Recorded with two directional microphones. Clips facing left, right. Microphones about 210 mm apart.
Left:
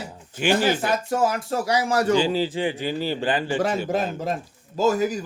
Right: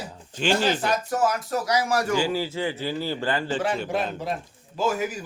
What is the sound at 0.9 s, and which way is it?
A man's voice, 25° left (ahead or behind).